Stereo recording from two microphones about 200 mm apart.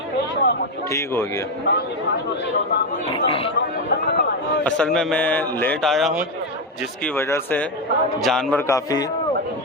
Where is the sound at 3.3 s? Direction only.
25° left (ahead or behind).